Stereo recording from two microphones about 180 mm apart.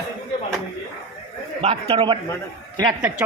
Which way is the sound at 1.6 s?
35° right (ahead or behind).